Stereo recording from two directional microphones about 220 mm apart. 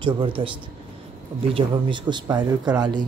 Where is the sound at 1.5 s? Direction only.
20° right (ahead or behind).